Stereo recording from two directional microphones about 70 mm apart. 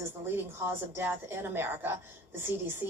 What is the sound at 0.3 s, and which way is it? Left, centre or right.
Speech, right.